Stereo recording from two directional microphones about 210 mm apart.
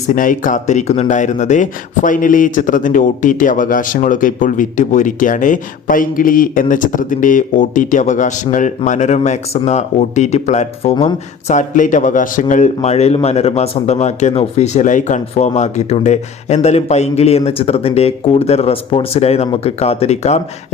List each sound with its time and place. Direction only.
0.1 s speech: 40° left (ahead or behind)